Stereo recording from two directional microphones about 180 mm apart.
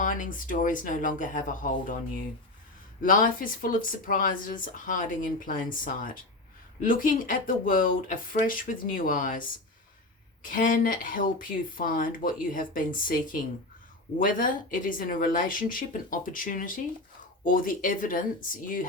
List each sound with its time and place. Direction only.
0.0 s speech: 45° left (ahead or behind)
3.0 s speech: 50° left (ahead or behind)